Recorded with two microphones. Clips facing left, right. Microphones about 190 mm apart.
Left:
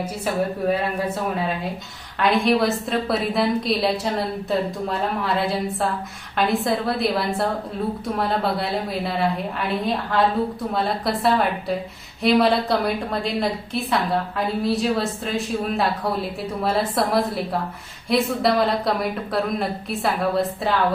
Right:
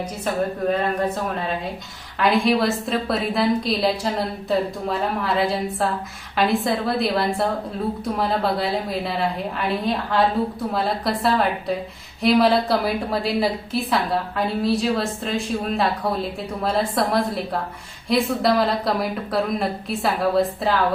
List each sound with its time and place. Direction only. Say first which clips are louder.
0.7 s a woman's voice: right 1 dB; 10° left (ahead or behind)